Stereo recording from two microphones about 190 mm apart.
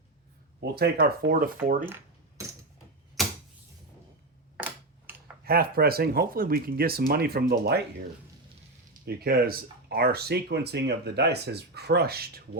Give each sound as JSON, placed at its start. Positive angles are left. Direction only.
{"t": 0.6, "sound": "speech", "side_deg": -55}
{"t": 3.2, "sound": "typewriter", "side_deg": 0}
{"t": 4.5, "sound": "a sound", "side_deg": -10}
{"t": 5.5, "sound": "speech", "side_deg": -50}
{"t": 8.9, "sound": "speech", "side_deg": -55}